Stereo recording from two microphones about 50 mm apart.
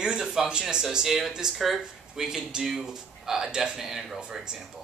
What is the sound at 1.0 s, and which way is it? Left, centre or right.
A man's voice, centre.